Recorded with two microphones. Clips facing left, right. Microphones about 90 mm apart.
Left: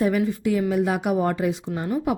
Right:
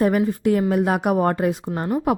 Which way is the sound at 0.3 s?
45° right (ahead or behind).